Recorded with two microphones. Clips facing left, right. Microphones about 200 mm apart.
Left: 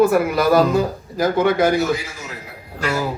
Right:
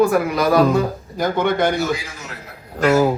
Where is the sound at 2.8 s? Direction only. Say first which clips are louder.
Right 8 dB; 50° right (ahead or behind).